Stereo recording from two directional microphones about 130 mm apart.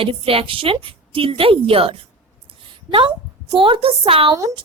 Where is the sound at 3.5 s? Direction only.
40° right (ahead or behind).